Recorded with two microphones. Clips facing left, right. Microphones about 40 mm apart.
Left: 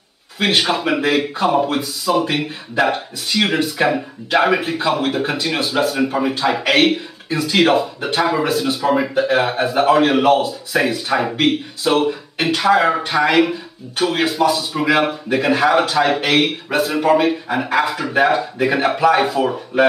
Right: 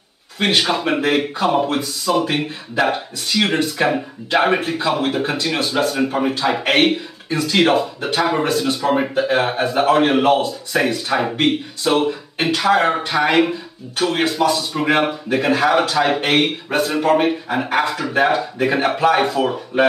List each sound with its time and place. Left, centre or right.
0.4 s speech: centre